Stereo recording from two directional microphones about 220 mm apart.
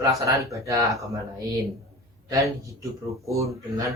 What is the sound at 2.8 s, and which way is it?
Speech, 15° right (ahead or behind).